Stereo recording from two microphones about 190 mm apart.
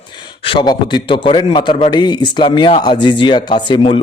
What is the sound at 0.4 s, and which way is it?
A man's voice, 25° left (ahead or behind).